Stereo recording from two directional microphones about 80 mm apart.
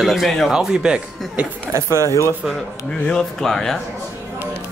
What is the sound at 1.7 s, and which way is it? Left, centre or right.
Speech, right.